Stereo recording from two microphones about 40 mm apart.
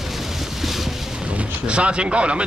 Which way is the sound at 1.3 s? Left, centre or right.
Right.